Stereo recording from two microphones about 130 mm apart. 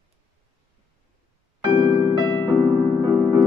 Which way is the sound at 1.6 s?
30° right (ahead or behind).